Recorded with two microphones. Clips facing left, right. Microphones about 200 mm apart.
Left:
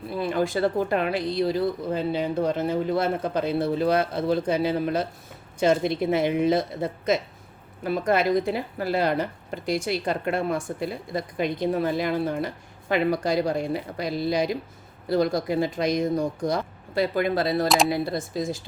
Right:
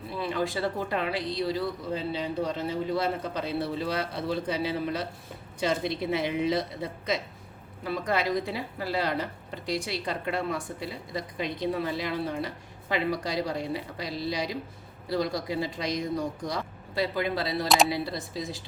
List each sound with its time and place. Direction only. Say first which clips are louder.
0.2 s speech: left 5 dB; 45° left (ahead or behind)